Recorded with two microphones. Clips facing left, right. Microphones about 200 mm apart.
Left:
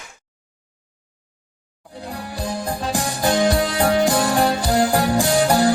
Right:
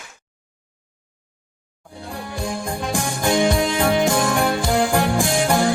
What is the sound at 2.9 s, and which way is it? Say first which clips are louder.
Music: even; 35° left (ahead or behind).